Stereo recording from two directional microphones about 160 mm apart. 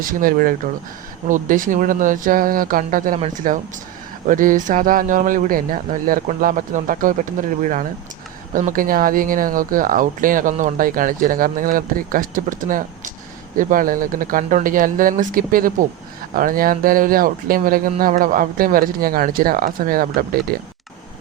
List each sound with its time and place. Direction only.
0.0 s speech: 60° right (ahead or behind)